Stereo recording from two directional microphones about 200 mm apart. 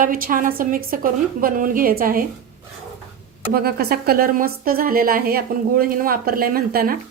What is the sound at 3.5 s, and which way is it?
Speech, 50° right (ahead or behind).